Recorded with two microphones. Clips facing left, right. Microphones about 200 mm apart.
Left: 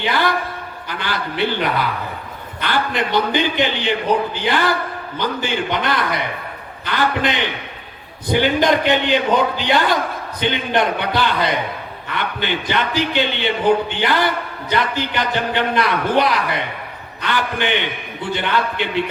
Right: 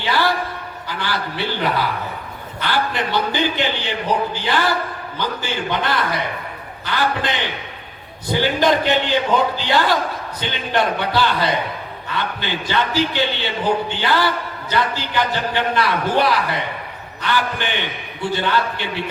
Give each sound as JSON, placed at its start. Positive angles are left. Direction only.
{"t": 0.0, "sound": "a sound", "side_deg": 20}
{"t": 0.9, "sound": "a man's voice", "side_deg": 20}
{"t": 2.6, "sound": "a man's voice", "side_deg": 20}